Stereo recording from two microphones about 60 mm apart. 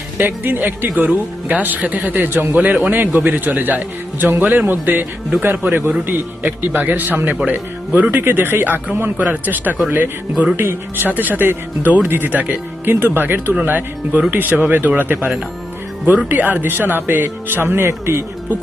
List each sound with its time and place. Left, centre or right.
0.2 s a man's voice: right
2.6 s a man's voice: right